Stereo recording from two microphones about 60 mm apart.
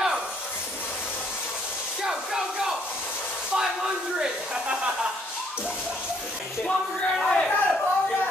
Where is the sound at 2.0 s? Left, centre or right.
Centre.